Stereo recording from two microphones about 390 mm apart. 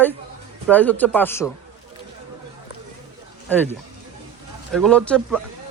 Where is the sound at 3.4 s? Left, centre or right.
Centre.